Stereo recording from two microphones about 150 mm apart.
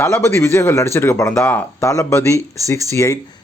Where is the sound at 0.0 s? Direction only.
15° left (ahead or behind).